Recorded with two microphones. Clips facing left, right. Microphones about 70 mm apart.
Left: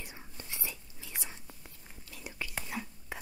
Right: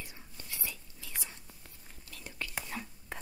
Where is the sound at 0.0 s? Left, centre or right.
Left.